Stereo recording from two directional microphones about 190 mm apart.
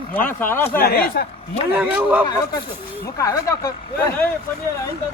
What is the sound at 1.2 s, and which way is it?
Speech, 55° left (ahead or behind).